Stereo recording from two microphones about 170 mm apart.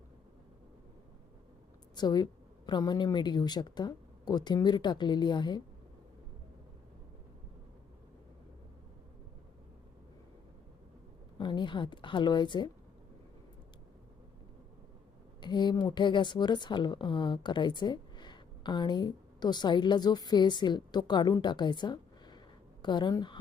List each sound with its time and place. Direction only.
2.0 s a woman's voice: 25° left (ahead or behind)
11.3 s a woman's voice: 25° left (ahead or behind)
15.4 s a woman's voice: 25° left (ahead or behind)